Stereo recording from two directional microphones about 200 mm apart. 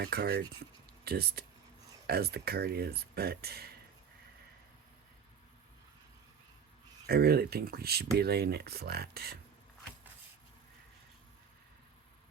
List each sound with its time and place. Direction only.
0.0 s speech: 50° right (ahead or behind)
7.1 s speech: 50° right (ahead or behind)